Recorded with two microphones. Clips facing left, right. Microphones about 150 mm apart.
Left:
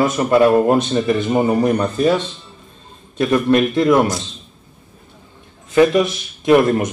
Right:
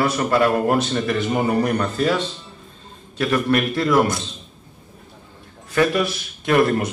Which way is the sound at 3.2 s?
20° left (ahead or behind).